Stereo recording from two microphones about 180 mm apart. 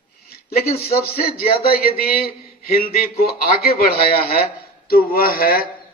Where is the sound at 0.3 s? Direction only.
60° left (ahead or behind).